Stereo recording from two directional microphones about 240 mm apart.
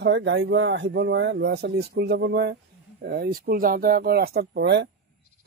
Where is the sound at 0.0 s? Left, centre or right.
Right.